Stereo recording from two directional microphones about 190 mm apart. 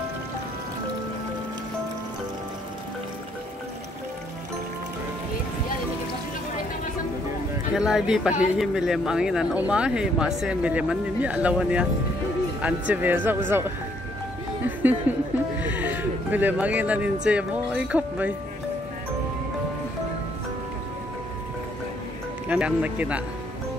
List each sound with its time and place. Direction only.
7.7 s speech: centre (ahead or behind)
15.1 s speech: 10° right (ahead or behind)
22.5 s speech: 5° right (ahead or behind)